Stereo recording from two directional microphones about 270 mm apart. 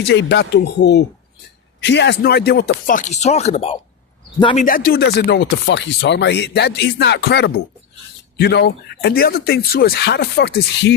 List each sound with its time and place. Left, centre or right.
0.1 s speech: left; by 4.6 s centre
4.6 s speech: left